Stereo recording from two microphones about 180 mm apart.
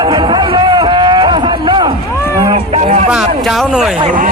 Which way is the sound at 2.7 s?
40° right (ahead or behind).